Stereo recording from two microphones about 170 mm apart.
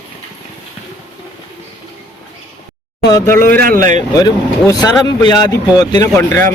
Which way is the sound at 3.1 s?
15° left (ahead or behind).